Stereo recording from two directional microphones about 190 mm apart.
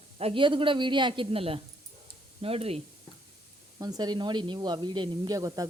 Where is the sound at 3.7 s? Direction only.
20° right (ahead or behind).